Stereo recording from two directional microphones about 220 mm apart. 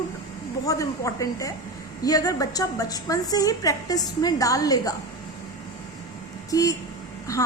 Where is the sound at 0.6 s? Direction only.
15° left (ahead or behind).